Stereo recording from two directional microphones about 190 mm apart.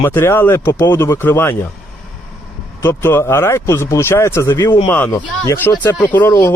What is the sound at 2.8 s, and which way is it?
Speech, 10° left (ahead or behind).